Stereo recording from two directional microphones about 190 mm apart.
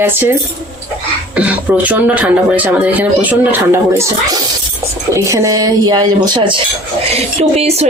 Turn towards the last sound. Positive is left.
turn(degrees=-35)  # may be behind; listen again after turning